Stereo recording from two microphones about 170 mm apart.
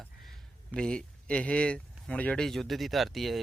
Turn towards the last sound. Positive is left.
turn(degrees=0)  # may be behind; listen again after turning